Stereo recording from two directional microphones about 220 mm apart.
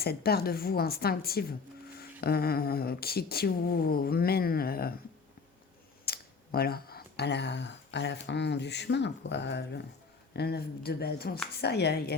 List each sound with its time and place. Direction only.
0.0 s speech: 45° left (ahead or behind)
6.1 s speech: 45° left (ahead or behind)